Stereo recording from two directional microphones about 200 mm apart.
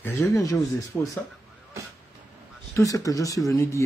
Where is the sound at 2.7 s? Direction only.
15° left (ahead or behind).